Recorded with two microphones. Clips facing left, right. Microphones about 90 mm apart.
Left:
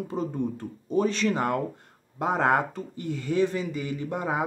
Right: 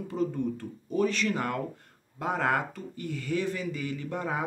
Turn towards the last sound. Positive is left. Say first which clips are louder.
# left 4 dB
turn(degrees=15)  # may be behind; listen again after turning